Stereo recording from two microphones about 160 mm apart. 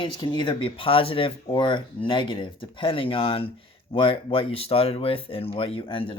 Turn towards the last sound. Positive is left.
turn(degrees=35)  # may be behind; listen again after turning